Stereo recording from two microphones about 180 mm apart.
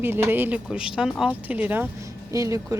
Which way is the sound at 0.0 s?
10° right (ahead or behind).